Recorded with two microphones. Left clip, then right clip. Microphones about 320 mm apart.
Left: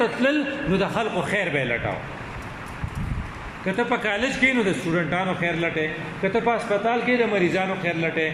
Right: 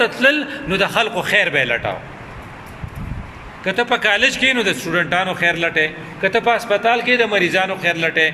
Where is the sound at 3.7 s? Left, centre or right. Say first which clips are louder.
Right 7 dB; right.